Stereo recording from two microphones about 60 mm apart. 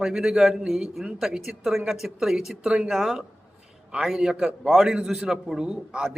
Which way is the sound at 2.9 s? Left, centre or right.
Centre.